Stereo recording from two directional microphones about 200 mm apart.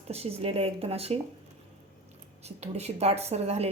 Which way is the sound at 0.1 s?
30° right (ahead or behind).